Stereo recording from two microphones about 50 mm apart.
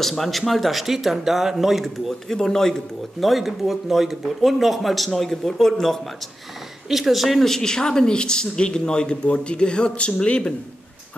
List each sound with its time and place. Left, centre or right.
0.2 s speech: centre
2.2 s speech: centre
3.2 s speech: centre
6.9 s speech: centre
7.4 s speech: centre